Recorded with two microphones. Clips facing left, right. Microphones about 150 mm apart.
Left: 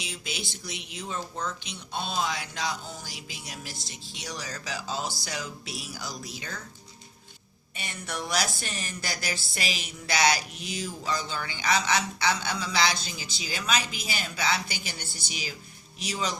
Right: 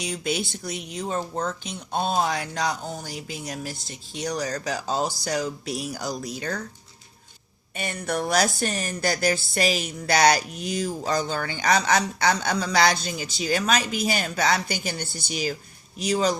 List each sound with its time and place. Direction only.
0.0 s speech: 50° right (ahead or behind)
7.8 s speech: 50° right (ahead or behind)